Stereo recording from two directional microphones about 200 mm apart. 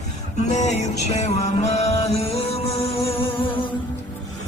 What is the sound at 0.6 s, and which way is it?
Music, 35° left (ahead or behind).